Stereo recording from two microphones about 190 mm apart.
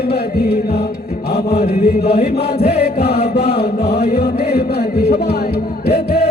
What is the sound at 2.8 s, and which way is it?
Chant, 60° left (ahead or behind).